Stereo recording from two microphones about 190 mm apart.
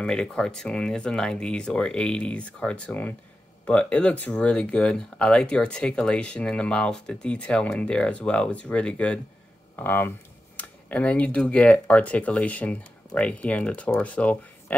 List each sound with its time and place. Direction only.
0.0 s speech: 5° left (ahead or behind)